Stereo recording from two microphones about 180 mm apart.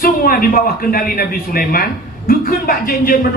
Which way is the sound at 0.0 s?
55° left (ahead or behind).